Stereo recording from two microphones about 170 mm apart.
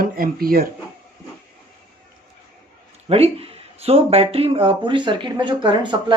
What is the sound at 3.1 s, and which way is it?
Speech, 35° right (ahead or behind).